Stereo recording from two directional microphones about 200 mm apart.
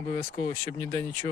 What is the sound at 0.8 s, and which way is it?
Speech, 15° left (ahead or behind).